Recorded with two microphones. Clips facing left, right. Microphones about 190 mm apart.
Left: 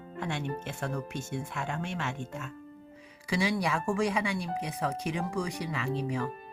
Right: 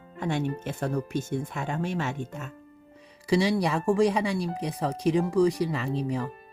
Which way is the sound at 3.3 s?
35° right (ahead or behind).